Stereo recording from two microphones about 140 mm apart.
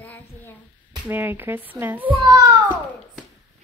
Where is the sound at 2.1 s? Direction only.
35° right (ahead or behind).